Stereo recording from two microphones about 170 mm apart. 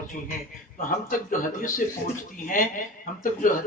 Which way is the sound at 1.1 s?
55° left (ahead or behind).